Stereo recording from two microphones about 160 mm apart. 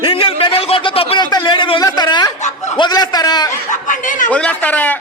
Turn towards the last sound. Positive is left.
turn(degrees=10)  # may be behind; listen again after turning